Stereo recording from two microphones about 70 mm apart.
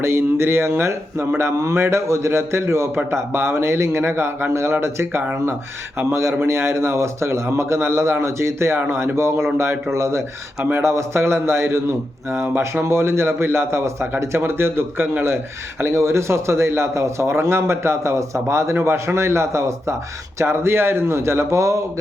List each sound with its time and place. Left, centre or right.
0.0 s a man's voice: right
15.8 s a man's voice: right